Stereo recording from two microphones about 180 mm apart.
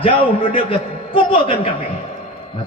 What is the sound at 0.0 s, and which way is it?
A man's voice, 30° left (ahead or behind).